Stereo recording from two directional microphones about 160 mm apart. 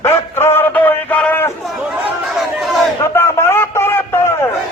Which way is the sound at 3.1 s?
15° left (ahead or behind).